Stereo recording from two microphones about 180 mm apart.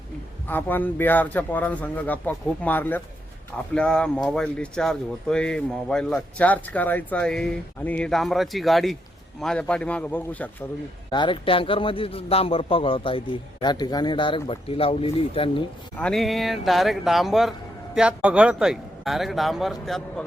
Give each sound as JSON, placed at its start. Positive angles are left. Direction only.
{"t": 0.4, "sound": "a man's voice", "side_deg": 10}
{"t": 11.1, "sound": "a man's voice", "side_deg": 25}
{"t": 16.0, "sound": "speech", "side_deg": 5}